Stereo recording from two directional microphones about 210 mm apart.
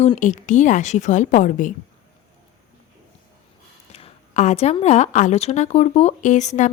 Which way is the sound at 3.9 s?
30° left (ahead or behind).